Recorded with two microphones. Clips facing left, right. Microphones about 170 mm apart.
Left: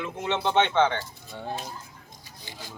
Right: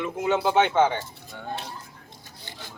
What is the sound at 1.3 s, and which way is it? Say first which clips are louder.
Speech: left 2 dB; 25° left (ahead or behind).